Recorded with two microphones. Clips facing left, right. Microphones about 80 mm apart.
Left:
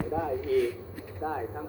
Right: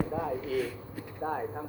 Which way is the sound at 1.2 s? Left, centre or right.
Centre.